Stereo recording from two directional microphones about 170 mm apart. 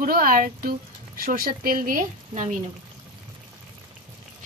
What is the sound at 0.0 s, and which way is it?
Speech, 55° right (ahead or behind).